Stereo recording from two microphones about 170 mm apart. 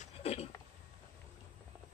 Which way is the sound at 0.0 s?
35° left (ahead or behind).